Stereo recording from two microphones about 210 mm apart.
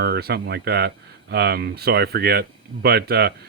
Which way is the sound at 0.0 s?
50° right (ahead or behind).